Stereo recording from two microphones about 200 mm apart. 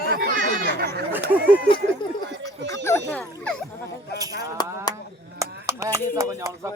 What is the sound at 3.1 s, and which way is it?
Speech, 5° left (ahead or behind).